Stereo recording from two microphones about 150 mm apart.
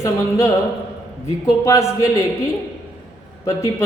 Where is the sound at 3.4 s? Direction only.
20° left (ahead or behind).